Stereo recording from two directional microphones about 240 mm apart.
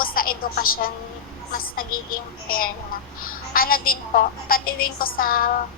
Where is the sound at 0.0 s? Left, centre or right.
Left.